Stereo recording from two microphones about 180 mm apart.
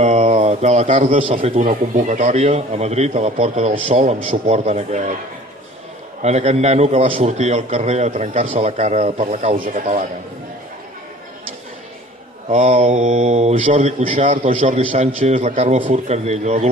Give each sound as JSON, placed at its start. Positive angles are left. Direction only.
{"t": 0.0, "sound": "speech", "side_deg": -35}
{"t": 1.7, "sound": "speech", "side_deg": -45}
{"t": 6.2, "sound": "speech", "side_deg": -35}
{"t": 12.4, "sound": "speech", "side_deg": -40}